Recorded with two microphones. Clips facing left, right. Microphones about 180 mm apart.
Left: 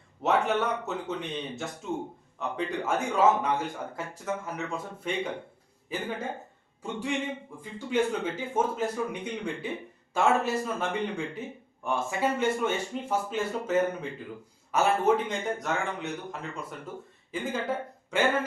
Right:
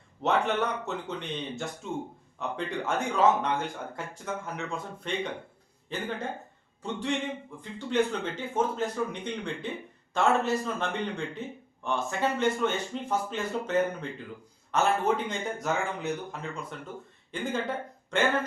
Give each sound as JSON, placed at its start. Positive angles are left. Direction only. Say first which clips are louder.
{"t": 0.2, "sound": "speech", "louder": "left 1 dB", "side_deg": 5}